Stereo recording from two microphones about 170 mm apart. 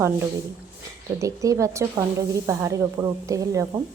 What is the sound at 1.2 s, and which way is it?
A woman's voice, 20° right (ahead or behind).